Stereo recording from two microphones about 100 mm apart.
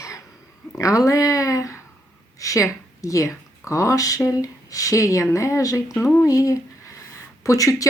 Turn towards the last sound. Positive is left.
turn(degrees=35)  # may be behind; listen again after turning